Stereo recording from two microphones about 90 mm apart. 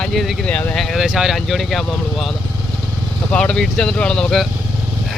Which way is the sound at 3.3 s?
10° left (ahead or behind).